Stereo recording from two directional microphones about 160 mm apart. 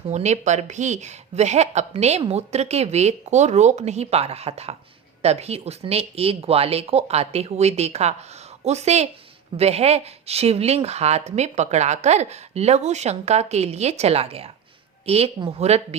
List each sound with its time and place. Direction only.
0.1 s speech: 45° right (ahead or behind)